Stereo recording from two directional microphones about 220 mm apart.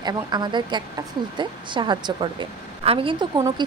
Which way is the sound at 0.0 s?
20° right (ahead or behind).